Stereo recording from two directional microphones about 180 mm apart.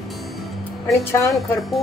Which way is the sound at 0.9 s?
15° left (ahead or behind).